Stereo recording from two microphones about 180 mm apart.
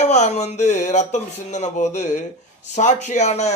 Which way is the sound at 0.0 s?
40° left (ahead or behind).